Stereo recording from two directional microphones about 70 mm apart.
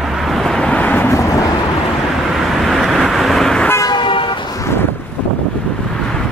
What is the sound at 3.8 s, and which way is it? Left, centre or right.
Vehicle, left.